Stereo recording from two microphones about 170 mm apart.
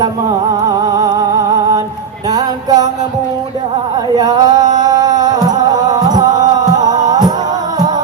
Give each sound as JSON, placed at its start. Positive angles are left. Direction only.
{"t": 0.9, "sound": "a sound", "side_deg": -25}
{"t": 2.3, "sound": "music", "side_deg": -25}
{"t": 4.1, "sound": "music", "side_deg": -25}